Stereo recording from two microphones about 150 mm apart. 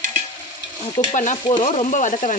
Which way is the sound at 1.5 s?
40° left (ahead or behind).